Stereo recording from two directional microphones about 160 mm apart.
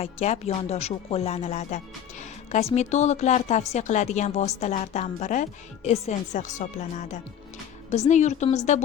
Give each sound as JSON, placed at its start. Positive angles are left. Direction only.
{"t": 0.0, "sound": "speech", "side_deg": 40}